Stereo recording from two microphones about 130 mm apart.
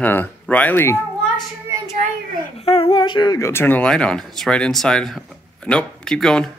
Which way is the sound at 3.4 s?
20° left (ahead or behind).